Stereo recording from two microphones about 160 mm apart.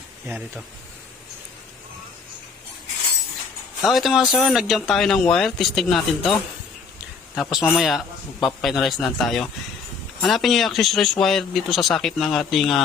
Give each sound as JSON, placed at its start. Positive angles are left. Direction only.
{"t": 0.3, "sound": "speech", "side_deg": -10}
{"t": 3.8, "sound": "speech", "side_deg": 0}